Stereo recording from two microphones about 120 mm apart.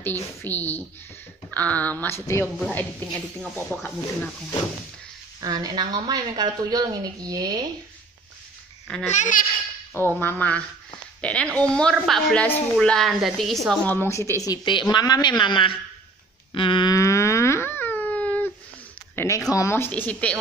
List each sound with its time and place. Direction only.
0.0 s a woman's voice: 15° left (ahead or behind)
3.1 s speech: centre (ahead or behind)
5.4 s a woman's voice: 35° right (ahead or behind)
9.0 s a child's voice: 85° left
9.9 s a woman's voice: 15° left (ahead or behind); by 13.7 s centre (ahead or behind)
13.8 s speech: 20° left (ahead or behind); by 16.9 s 45° left (ahead or behind)
16.9 s a sound: 25° left (ahead or behind)
19.1 s a woman's voice: 25° left (ahead or behind)